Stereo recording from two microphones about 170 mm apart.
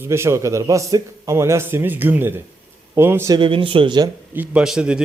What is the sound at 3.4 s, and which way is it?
Speech, 30° right (ahead or behind).